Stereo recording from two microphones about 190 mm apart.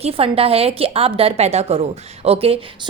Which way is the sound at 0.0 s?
30° right (ahead or behind).